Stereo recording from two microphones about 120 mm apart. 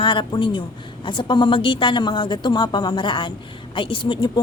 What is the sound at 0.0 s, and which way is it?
A woman's voice, 45° left (ahead or behind).